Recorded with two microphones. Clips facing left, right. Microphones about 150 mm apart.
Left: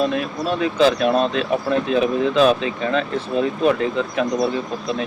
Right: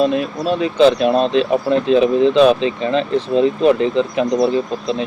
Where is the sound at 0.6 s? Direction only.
25° right (ahead or behind).